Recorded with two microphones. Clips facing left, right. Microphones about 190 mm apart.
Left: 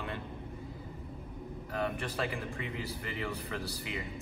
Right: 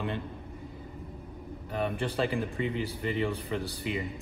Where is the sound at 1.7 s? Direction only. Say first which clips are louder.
Right 4 dB; 30° right (ahead or behind).